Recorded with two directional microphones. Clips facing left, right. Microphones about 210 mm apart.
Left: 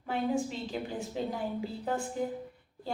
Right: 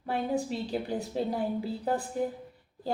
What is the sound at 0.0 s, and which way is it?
A woman's voice, 35° right (ahead or behind).